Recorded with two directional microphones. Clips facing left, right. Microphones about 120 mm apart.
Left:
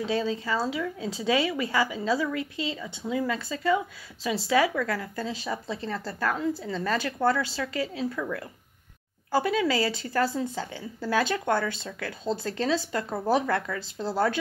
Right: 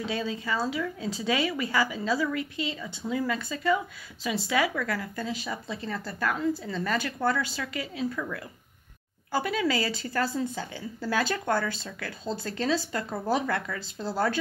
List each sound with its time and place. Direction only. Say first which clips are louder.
0.0 s speech: left 4 dB; 30° left (ahead or behind)